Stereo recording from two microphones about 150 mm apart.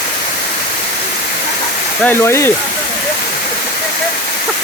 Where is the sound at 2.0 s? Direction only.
15° left (ahead or behind).